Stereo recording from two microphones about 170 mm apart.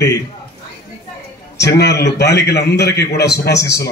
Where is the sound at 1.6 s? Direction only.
80° left.